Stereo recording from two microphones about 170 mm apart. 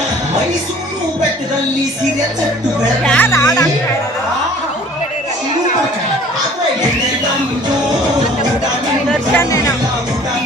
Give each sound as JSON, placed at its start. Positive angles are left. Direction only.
{"t": 3.0, "sound": "speech", "side_deg": 5}
{"t": 9.3, "sound": "music", "side_deg": 15}